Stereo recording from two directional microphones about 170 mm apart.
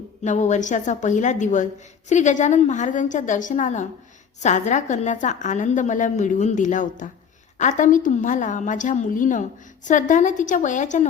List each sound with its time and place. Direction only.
0.3 s a woman's voice: 45° left (ahead or behind)